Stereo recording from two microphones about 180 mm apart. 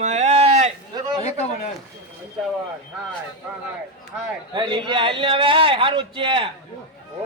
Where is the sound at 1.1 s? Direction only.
40° left (ahead or behind).